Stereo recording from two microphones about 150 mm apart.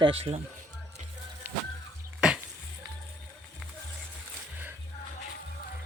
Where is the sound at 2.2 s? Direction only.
5° right (ahead or behind).